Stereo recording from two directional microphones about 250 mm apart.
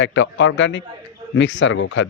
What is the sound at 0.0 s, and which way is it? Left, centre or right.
Speech, left.